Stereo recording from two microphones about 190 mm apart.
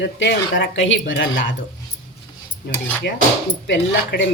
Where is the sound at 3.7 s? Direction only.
65° left (ahead or behind).